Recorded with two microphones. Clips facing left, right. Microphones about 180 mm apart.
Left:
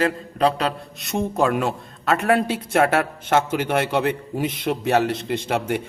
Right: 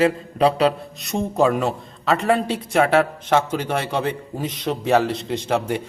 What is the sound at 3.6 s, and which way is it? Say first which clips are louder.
Speech: left 2 dB; 65° left (ahead or behind).